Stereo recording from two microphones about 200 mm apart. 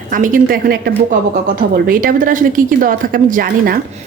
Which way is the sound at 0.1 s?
45° right (ahead or behind).